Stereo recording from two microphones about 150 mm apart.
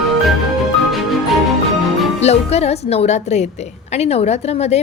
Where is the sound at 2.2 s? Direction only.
45° left (ahead or behind).